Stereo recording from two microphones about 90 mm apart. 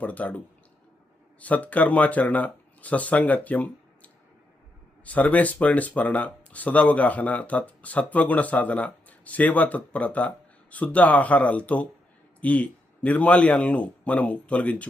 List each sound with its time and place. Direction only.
0.0 s speech: 15° left (ahead or behind)